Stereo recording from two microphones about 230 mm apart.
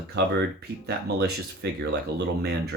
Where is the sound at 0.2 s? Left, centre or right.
Right.